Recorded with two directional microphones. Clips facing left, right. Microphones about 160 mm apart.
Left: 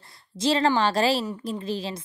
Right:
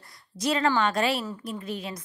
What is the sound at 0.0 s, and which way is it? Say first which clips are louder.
A woman's voice: left 4 dB; 25° left (ahead or behind).